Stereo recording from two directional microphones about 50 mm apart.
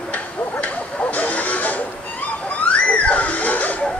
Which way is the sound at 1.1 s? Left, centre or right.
Left.